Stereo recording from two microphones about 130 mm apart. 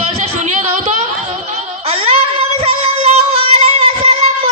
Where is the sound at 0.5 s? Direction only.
65° right (ahead or behind).